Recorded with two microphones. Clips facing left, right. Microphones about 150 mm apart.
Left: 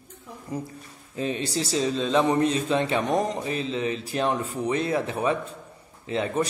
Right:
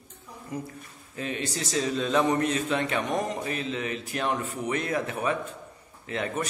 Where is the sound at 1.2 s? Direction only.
30° left (ahead or behind).